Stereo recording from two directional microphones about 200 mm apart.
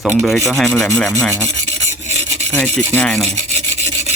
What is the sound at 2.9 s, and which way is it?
Speech, 5° left (ahead or behind).